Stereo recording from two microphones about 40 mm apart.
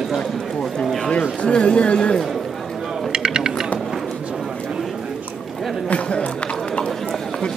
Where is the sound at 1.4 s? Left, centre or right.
Left.